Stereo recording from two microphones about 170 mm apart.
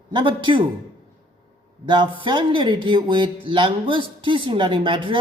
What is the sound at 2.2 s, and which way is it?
A man's voice, 30° right (ahead or behind).